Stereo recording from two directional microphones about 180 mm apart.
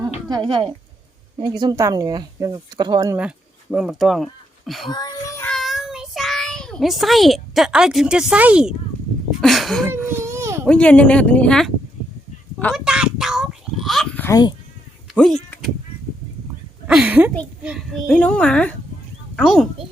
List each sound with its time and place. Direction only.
0.3 s speech: 25° right (ahead or behind)
3.2 s speech: 5° right (ahead or behind)
4.9 s child singing: 20° left (ahead or behind)
5.5 s child singing: centre (ahead or behind)
9.4 s a sound: centre (ahead or behind)
10.2 s baby cry: 15° right (ahead or behind)
10.7 s speech: 5° left (ahead or behind)
12.5 s a sound: centre (ahead or behind)
14.3 s speech: 20° left (ahead or behind)
15.1 s speech: 5° left (ahead or behind)
16.8 s a child's voice: 5° right (ahead or behind)
18.1 s a woman's voice: 5° left (ahead or behind)